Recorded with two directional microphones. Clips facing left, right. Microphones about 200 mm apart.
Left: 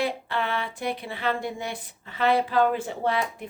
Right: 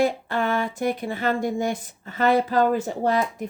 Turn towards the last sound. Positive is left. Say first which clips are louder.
# right 4 dB
turn(degrees=-40)  # may be behind; listen again after turning